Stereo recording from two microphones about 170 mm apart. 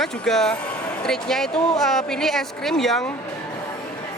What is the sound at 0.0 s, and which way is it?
Speech, centre (ahead or behind).